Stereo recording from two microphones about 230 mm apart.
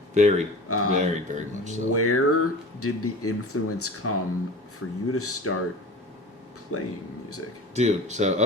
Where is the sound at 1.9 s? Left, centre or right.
Left.